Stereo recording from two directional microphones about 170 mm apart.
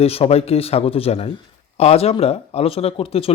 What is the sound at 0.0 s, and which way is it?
Speech, 35° left (ahead or behind).